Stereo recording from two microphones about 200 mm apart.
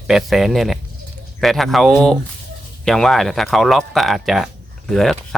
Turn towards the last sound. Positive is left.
turn(degrees=0)  # may be behind; listen again after turning